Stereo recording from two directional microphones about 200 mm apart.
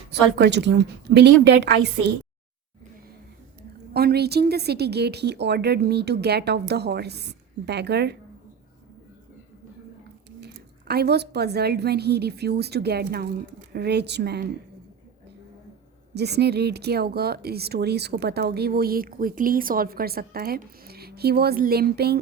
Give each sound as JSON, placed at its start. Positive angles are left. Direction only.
{"t": 0.1, "sound": "a woman's voice", "side_deg": -55}
{"t": 3.9, "sound": "a woman's voice", "side_deg": -55}
{"t": 10.4, "sound": "a woman's voice", "side_deg": -55}
{"t": 16.1, "sound": "speech", "side_deg": -55}